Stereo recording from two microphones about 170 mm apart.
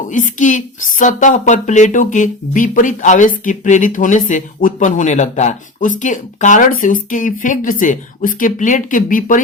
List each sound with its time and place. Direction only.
0.1 s speech: 50° left (ahead or behind)